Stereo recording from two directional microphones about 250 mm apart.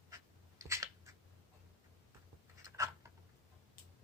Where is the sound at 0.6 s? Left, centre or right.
Centre.